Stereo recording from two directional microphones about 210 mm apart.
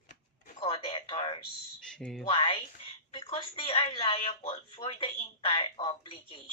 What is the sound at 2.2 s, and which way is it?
Speech, 25° left (ahead or behind).